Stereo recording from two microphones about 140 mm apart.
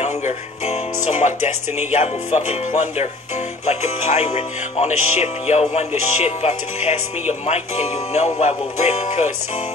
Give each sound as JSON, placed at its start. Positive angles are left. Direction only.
{"t": 0.0, "sound": "music", "side_deg": 55}
{"t": 1.8, "sound": "speech", "side_deg": 55}
{"t": 3.6, "sound": "speech", "side_deg": 50}